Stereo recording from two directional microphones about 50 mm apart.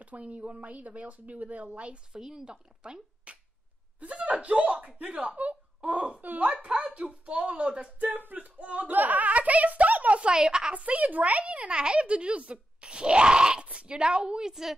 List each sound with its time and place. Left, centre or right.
0.0 s a child's voice: right
2.1 s a child's voice: centre
8.1 s speech: right
10.3 s a woman's voice: centre
10.7 s a child's voice: right
14.5 s a woman's voice: centre